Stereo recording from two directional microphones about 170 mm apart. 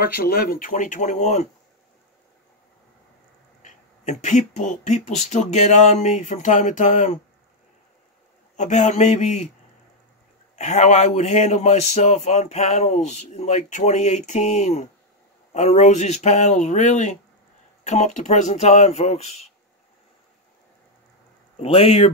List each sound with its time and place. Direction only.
0.0 s speech: 65° left (ahead or behind); by 1.5 s 40° left (ahead or behind)
3.6 s speech: 45° left (ahead or behind)
8.5 s speech: 45° left (ahead or behind)
10.5 s a man's voice: 40° left (ahead or behind)
21.6 s a man's voice: 30° left (ahead or behind)